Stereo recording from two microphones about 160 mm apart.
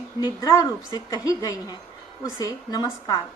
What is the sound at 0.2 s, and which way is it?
A woman's voice, 25° left (ahead or behind).